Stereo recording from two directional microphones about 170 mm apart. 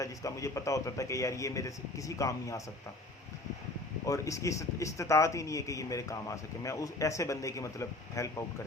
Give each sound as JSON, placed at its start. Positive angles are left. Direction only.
{"t": 0.0, "sound": "speech", "side_deg": 20}
{"t": 4.0, "sound": "speech", "side_deg": 20}